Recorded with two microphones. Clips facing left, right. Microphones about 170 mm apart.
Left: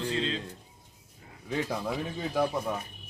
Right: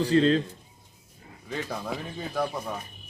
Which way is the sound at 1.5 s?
5° left (ahead or behind).